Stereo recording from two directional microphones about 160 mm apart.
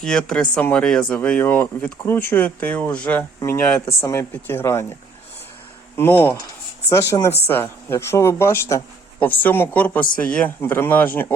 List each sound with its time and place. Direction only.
0.0 s speech: 5° left (ahead or behind)
6.0 s speech: 15° left (ahead or behind)